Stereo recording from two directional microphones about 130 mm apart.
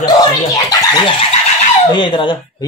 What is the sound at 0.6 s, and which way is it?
Speech, 35° left (ahead or behind).